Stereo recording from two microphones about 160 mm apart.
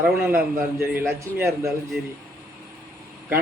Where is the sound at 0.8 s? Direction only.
15° right (ahead or behind).